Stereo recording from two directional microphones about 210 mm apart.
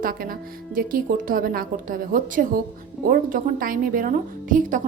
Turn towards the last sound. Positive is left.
turn(degrees=-40)  # may be behind; listen again after turning